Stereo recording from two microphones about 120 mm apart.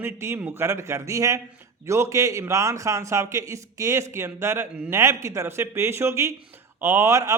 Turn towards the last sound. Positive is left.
turn(degrees=-25)  # may be behind; listen again after turning